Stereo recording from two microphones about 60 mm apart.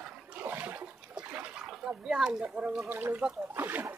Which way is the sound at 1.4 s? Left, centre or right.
Centre.